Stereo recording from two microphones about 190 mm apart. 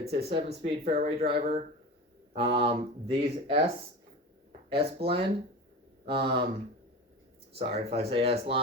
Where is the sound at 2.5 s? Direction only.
30° right (ahead or behind).